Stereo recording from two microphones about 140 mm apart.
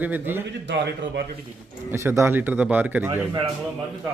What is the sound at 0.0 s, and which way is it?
Speech, 15° right (ahead or behind).